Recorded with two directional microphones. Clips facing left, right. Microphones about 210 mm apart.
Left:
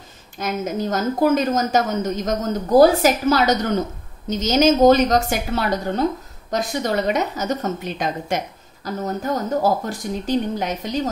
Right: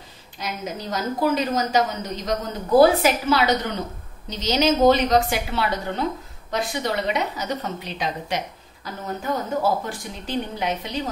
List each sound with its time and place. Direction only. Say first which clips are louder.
0.4 s a woman's voice: left 7 dB; 45° left (ahead or behind)